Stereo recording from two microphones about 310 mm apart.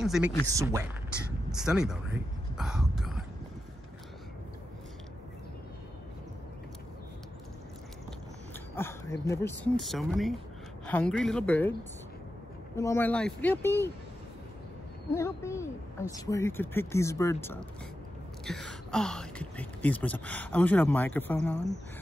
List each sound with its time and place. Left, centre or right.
0.0 s speech: centre
1.5 s a sound: centre
8.7 s speech: centre
12.7 s speech: centre
15.1 s speech: centre